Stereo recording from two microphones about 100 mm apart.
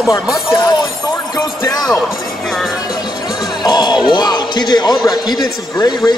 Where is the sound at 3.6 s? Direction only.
45° left (ahead or behind).